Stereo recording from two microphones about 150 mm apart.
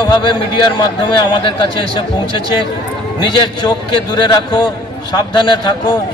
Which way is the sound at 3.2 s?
30° left (ahead or behind).